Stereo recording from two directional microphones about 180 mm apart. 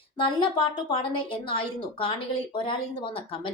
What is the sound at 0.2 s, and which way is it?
A woman's voice, 25° left (ahead or behind).